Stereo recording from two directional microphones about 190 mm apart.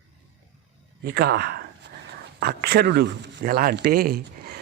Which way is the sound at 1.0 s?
60° right (ahead or behind).